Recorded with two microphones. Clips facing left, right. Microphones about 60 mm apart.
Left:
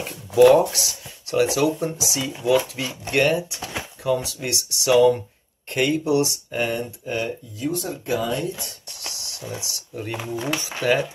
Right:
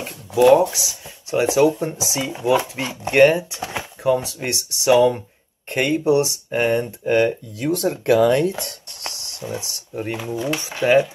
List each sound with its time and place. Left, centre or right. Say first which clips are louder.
0.0 s speech: left 1 dB; centre
1.3 s speech: right 3 dB; right
7.1 s speech: right 11 dB; right
7.6 s speech: right 7 dB; right
9.0 s a sound: right 4 dB; right
9.6 s speech: right 2 dB; right
10.1 s speech: right 1 dB; centre
10.6 s speech: right 6 dB; right